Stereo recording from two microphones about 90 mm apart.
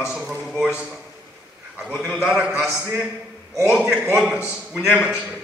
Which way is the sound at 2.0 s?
15° right (ahead or behind).